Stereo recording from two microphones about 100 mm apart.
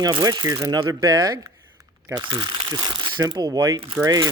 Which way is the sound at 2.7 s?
35° right (ahead or behind).